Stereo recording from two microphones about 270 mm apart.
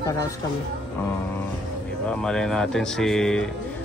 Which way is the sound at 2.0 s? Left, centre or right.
Centre.